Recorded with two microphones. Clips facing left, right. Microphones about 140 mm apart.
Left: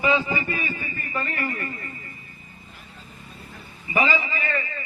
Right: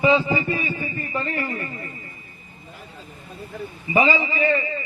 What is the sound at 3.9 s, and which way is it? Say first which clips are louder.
Speech: right 4 dB; 30° right (ahead or behind).